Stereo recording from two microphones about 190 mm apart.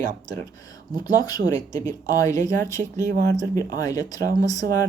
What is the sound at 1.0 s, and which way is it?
Speech, 20° left (ahead or behind).